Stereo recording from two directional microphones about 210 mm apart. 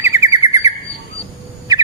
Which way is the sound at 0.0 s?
15° right (ahead or behind).